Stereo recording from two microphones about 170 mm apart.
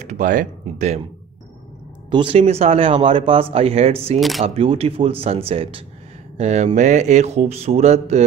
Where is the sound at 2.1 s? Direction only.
35° right (ahead or behind).